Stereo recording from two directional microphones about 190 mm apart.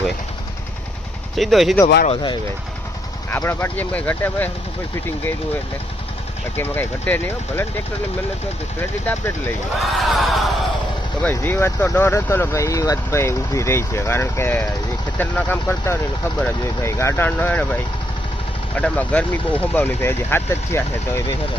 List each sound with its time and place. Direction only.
1.4 s a sound: centre (ahead or behind)
2.0 s speech: 25° left (ahead or behind)
3.2 s speech: 10° left (ahead or behind)
6.6 s speech: 10° left (ahead or behind)
8.8 s speech: 10° left (ahead or behind)
9.8 s a sound: centre (ahead or behind)
11.2 s speech: 10° left (ahead or behind)
18.8 s speech: 10° left (ahead or behind)